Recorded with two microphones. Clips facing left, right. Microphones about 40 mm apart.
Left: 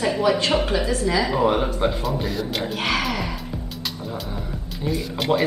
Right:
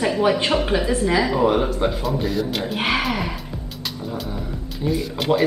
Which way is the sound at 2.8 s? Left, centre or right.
Centre.